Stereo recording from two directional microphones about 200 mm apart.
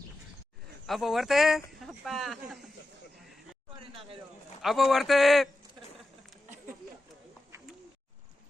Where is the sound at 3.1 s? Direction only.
Centre (ahead or behind).